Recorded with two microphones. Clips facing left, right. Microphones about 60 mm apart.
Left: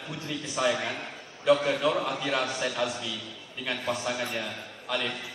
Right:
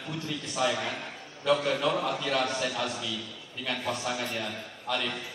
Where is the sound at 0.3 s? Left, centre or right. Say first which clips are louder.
Left 2 dB; centre.